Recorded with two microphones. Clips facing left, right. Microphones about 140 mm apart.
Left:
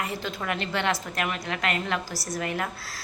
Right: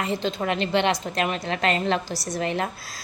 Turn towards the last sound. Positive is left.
turn(degrees=-20)  # may be behind; listen again after turning